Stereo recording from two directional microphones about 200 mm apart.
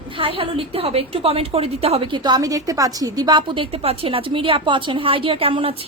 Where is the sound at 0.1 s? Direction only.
25° right (ahead or behind).